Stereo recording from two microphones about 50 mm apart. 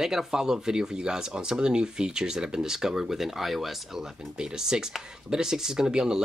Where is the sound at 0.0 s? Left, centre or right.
Centre.